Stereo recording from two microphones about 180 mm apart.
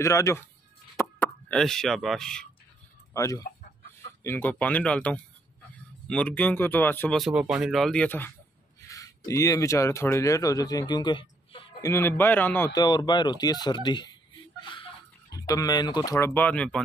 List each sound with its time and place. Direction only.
0.0 s speech: 15° left (ahead or behind)
3.1 s speech: 20° left (ahead or behind)
11.9 s speech: 10° left (ahead or behind)
15.3 s speech: 20° left (ahead or behind)
16.3 s speech: 10° left (ahead or behind)